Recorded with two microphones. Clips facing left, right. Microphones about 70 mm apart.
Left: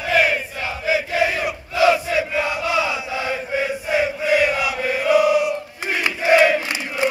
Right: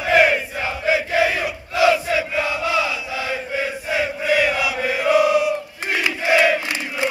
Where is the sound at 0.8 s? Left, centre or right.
Right.